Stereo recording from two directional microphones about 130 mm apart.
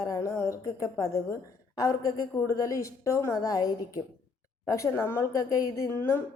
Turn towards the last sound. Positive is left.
turn(degrees=20)  # may be behind; listen again after turning